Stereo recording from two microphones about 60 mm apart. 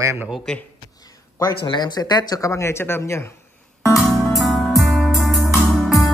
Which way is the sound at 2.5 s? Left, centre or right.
Left.